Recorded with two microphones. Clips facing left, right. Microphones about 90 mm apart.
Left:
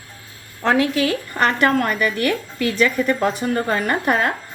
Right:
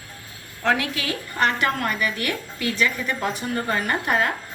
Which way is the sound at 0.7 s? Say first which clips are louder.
Left 6 dB; 35° left (ahead or behind).